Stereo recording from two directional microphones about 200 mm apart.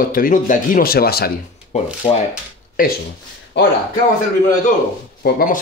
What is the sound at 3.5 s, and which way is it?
Speech, 60° left (ahead or behind).